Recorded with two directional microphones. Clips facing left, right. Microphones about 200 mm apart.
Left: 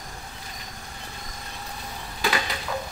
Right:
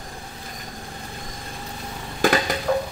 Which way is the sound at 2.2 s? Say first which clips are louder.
Right 8 dB; 50° right (ahead or behind).